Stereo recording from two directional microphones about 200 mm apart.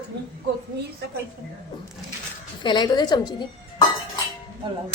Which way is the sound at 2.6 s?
20° left (ahead or behind).